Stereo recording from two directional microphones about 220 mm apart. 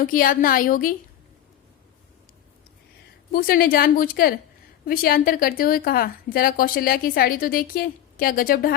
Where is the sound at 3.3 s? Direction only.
40° left (ahead or behind).